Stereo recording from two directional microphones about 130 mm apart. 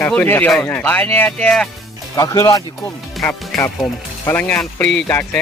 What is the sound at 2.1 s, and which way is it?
Speech, 25° left (ahead or behind).